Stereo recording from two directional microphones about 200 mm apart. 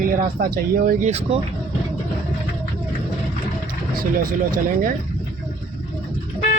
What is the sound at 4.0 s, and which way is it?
Speech, 45° right (ahead or behind).